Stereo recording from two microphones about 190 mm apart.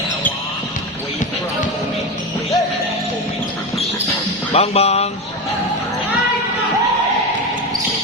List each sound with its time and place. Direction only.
4.5 s speech: 35° left (ahead or behind)